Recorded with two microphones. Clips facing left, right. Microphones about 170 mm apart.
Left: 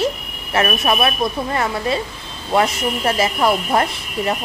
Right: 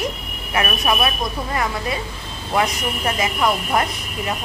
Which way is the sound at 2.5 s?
35° left (ahead or behind).